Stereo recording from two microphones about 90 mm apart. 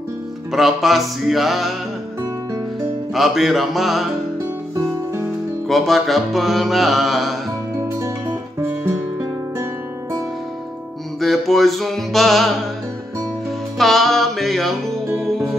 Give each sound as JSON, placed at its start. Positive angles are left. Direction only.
{"t": 0.5, "sound": "music", "side_deg": -5}
{"t": 3.2, "sound": "music", "side_deg": 0}
{"t": 4.7, "sound": "music", "side_deg": -30}
{"t": 5.7, "sound": "music", "side_deg": 0}
{"t": 8.5, "sound": "music", "side_deg": -30}
{"t": 11.1, "sound": "music", "side_deg": 0}
{"t": 13.7, "sound": "music", "side_deg": 0}